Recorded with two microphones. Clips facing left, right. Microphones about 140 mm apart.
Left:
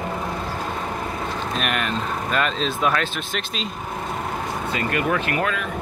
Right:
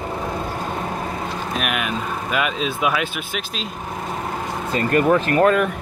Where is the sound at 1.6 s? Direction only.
5° right (ahead or behind).